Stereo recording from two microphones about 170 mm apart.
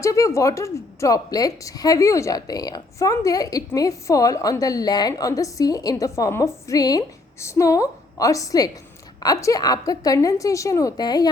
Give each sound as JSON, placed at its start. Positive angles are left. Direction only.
{"t": 0.0, "sound": "a woman's voice", "side_deg": 20}